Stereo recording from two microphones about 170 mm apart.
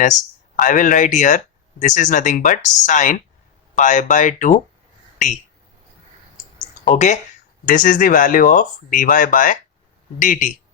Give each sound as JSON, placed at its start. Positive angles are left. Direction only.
{"t": 0.5, "sound": "speech", "side_deg": 50}
{"t": 6.8, "sound": "speech", "side_deg": 45}